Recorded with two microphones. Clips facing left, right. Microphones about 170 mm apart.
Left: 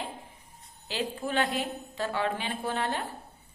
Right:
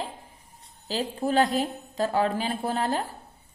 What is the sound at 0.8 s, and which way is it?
A woman's voice, 35° right (ahead or behind).